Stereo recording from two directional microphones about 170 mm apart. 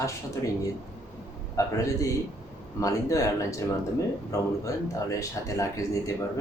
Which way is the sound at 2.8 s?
20° left (ahead or behind).